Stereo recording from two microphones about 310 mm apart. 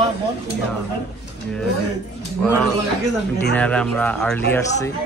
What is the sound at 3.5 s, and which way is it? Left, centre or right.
Speech, centre.